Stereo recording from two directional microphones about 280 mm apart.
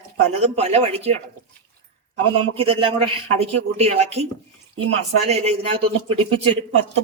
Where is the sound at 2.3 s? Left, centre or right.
Centre.